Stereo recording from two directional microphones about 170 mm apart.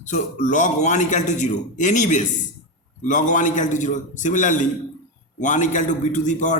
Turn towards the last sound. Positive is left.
turn(degrees=45)  # may be behind; listen again after turning